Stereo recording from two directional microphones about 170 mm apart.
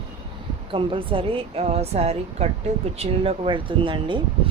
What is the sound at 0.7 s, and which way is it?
Speech, 30° right (ahead or behind).